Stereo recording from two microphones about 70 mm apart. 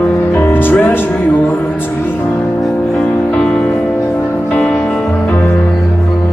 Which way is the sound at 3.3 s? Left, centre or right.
Centre.